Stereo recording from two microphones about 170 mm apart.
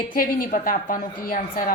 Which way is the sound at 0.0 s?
55° left (ahead or behind).